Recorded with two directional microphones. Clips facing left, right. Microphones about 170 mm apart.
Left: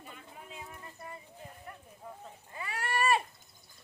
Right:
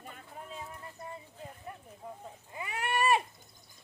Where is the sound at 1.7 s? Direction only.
20° right (ahead or behind).